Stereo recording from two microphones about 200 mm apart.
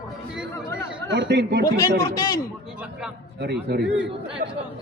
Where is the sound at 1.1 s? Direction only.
55° right (ahead or behind).